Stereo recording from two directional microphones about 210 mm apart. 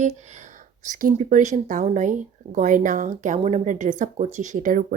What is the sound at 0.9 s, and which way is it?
Speech, 40° right (ahead or behind).